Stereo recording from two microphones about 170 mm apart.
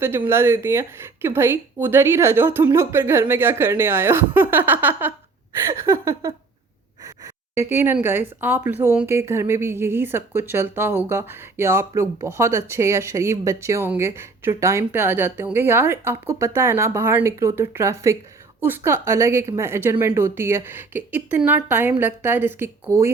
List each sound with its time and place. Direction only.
0.3 s speech: 15° right (ahead or behind)
7.7 s speech: 10° right (ahead or behind)